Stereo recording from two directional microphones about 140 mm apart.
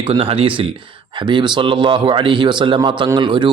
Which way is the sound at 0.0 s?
40° right (ahead or behind).